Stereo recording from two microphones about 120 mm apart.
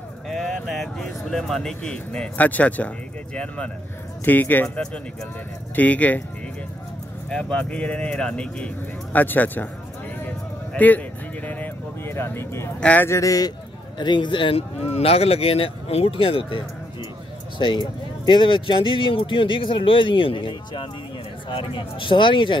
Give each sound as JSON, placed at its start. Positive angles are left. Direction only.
{"t": 0.3, "sound": "speech", "side_deg": 5}
{"t": 7.2, "sound": "speech", "side_deg": 5}
{"t": 10.2, "sound": "a sound", "side_deg": 15}
{"t": 12.8, "sound": "speech", "side_deg": 15}
{"t": 13.9, "sound": "a man's voice", "side_deg": 40}
{"t": 14.9, "sound": "speech", "side_deg": 55}